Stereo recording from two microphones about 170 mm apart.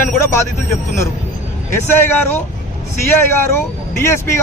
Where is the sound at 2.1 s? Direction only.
10° left (ahead or behind).